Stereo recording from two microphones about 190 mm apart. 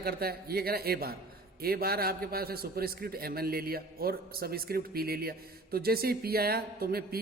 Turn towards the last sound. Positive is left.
turn(degrees=-55)  # may be behind; listen again after turning